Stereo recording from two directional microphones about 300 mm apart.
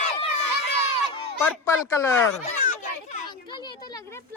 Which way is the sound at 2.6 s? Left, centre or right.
Left.